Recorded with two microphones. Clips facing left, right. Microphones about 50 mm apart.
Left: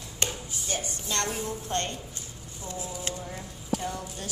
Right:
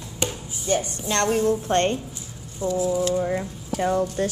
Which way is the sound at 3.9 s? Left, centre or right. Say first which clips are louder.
Right 14 dB; right.